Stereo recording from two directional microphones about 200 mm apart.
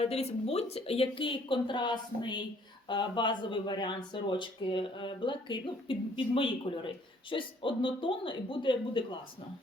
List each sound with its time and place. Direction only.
0.0 s speech: 30° left (ahead or behind)